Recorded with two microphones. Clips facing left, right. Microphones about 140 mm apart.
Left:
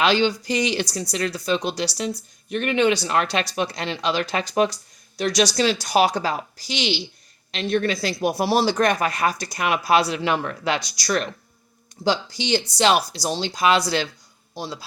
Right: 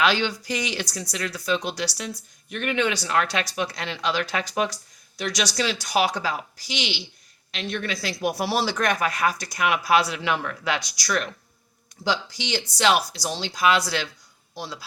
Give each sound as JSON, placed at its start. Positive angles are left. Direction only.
{"t": 0.0, "sound": "speech", "side_deg": 20}